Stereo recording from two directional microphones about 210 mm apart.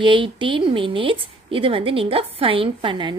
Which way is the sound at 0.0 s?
25° right (ahead or behind).